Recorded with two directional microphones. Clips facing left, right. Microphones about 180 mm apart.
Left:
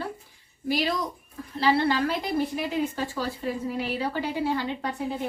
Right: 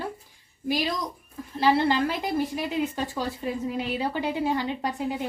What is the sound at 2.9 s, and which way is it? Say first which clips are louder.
A woman's voice: even; 20° right (ahead or behind).